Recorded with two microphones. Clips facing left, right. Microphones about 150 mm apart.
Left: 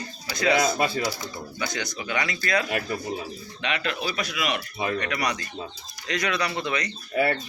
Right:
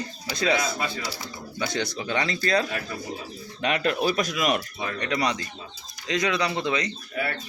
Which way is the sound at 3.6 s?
45° right (ahead or behind).